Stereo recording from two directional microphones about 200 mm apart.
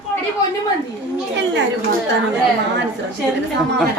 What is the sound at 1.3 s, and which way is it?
Chatter, 60° right (ahead or behind).